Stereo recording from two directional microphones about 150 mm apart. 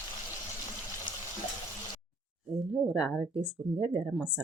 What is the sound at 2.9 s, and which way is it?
Speech, 5° right (ahead or behind).